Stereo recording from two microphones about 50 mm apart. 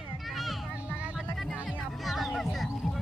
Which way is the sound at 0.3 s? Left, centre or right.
Centre.